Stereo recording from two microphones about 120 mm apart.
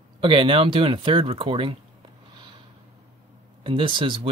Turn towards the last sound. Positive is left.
turn(degrees=-45)  # may be behind; listen again after turning